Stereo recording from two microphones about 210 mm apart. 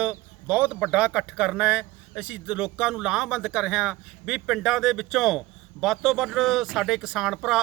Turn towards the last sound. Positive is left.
turn(degrees=0)  # may be behind; listen again after turning